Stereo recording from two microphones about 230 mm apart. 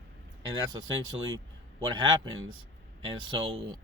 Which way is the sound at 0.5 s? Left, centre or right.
Centre.